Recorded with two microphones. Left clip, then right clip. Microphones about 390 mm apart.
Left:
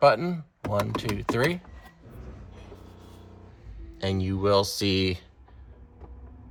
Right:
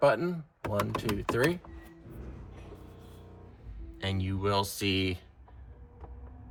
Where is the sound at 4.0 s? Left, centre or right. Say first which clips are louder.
Left 6 dB; centre.